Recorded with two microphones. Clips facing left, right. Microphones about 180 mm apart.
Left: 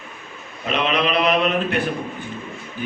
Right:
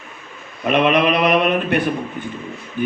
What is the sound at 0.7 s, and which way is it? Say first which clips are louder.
Speech: right 5 dB; 55° right (ahead or behind).